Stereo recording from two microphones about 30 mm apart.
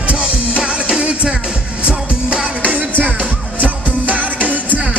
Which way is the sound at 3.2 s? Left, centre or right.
Right.